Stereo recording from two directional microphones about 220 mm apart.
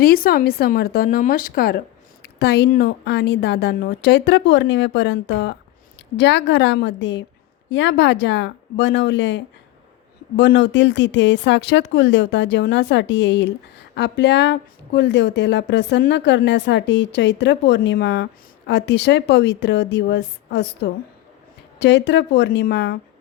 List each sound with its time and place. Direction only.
0.0 s speech: 45° left (ahead or behind)